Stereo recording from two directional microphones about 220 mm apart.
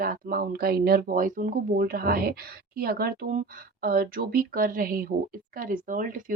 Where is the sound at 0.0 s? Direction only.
40° right (ahead or behind).